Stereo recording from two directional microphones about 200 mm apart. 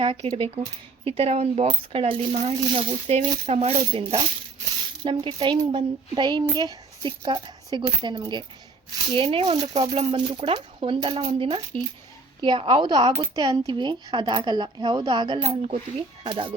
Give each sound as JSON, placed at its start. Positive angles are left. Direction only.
{"t": 0.0, "sound": "coin", "side_deg": -25}
{"t": 6.5, "sound": "a child's voice", "side_deg": -20}
{"t": 8.0, "sound": "coin", "side_deg": -20}